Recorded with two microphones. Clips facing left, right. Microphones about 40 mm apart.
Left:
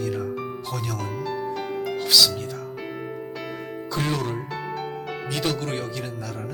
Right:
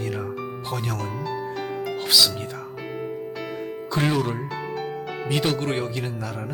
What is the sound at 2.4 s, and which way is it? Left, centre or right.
Music, centre.